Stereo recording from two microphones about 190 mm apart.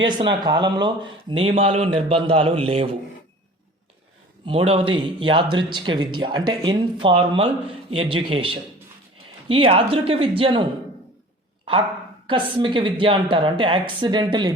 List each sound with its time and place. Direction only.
0.0 s speech: 25° right (ahead or behind)
4.4 s speech: 30° right (ahead or behind)
12.3 s speech: 25° right (ahead or behind)